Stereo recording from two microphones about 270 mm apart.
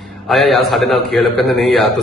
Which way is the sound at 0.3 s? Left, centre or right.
Centre.